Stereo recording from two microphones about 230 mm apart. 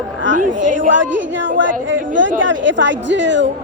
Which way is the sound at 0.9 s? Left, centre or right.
Right.